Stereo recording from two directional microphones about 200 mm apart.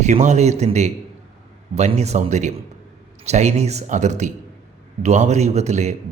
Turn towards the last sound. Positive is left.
turn(degrees=-35)  # may be behind; listen again after turning